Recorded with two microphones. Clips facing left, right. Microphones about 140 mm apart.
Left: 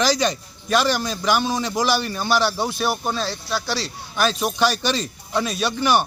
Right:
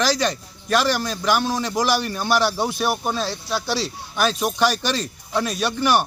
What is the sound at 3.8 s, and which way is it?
Speech, centre (ahead or behind).